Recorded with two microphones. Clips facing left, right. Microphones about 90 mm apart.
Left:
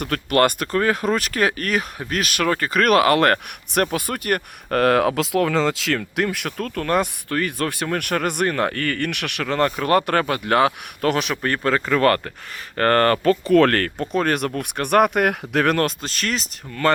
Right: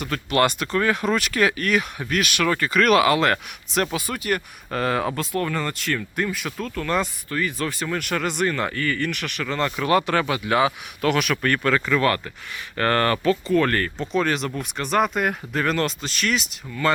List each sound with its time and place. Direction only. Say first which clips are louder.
0.0 s speech: left 3 dB; 50° left (ahead or behind)
11.0 s speech: even; 30° left (ahead or behind)
13.5 s speech: left 5 dB; 75° left (ahead or behind)
14.1 s speech: left 2 dB; 50° left (ahead or behind)